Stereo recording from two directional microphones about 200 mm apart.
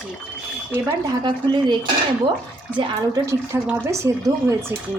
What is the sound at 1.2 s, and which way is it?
Speech, 20° right (ahead or behind).